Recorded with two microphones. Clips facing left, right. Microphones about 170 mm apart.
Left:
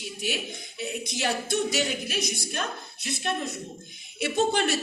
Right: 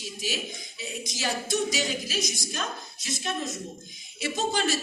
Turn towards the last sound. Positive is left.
turn(degrees=60)  # may be behind; listen again after turning